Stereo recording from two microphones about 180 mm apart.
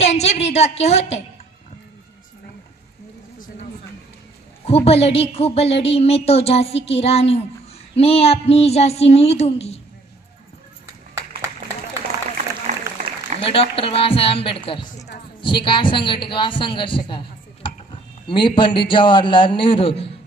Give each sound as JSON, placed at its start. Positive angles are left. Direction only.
{"t": 0.0, "sound": "a woman's voice", "side_deg": 35}
{"t": 4.6, "sound": "a woman's voice", "side_deg": 35}
{"t": 12.7, "sound": "applause", "side_deg": -40}
{"t": 13.4, "sound": "a woman's voice", "side_deg": 30}